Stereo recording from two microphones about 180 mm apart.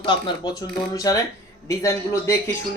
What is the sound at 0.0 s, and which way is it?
A man's voice, 25° left (ahead or behind).